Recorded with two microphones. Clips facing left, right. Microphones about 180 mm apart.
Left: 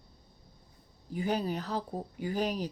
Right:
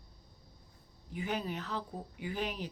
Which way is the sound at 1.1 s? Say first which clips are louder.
Left 5 dB; 40° left (ahead or behind).